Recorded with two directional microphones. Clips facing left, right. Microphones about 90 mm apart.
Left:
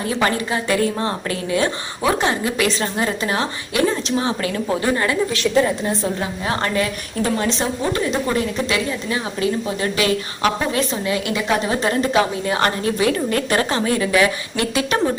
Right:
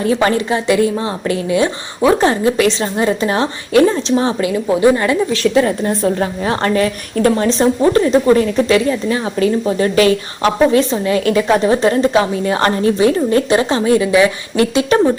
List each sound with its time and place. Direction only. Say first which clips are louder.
0.2 s a woman's voice: right 5 dB; 30° right (ahead or behind)
0.7 s a woman's voice: right 5 dB; 15° right (ahead or behind)
4.4 s a woman's voice: right 8 dB; 20° right (ahead or behind)
6.4 s a woman's voice: right 5 dB; 30° right (ahead or behind)
14.6 s a woman's voice: right 8 dB; 35° right (ahead or behind)